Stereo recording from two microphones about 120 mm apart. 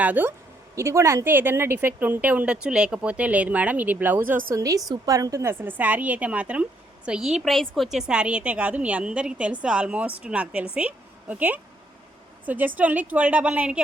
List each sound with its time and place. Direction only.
0.0 s a woman's voice: 15° right (ahead or behind)
4.5 s a woman's voice: 25° right (ahead or behind); by 13.8 s 10° right (ahead or behind)